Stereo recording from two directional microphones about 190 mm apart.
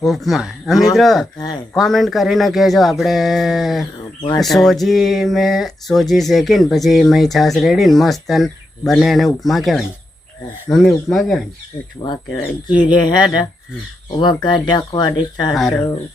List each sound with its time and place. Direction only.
0.0 s speech: centre (ahead or behind)
4.2 s speech: 20° left (ahead or behind)
4.5 s speech: centre (ahead or behind)
12.6 s speech: 25° left (ahead or behind)
15.5 s speech: centre (ahead or behind)